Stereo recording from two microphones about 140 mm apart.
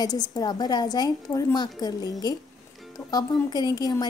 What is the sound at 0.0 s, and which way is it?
A woman's voice, 30° left (ahead or behind).